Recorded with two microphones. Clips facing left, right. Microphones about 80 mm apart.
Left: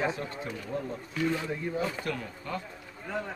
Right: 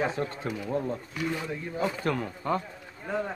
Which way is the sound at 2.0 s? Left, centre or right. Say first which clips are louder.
Right 6 dB; right.